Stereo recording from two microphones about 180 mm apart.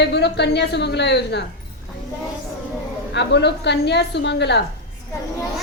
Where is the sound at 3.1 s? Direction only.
70° left (ahead or behind).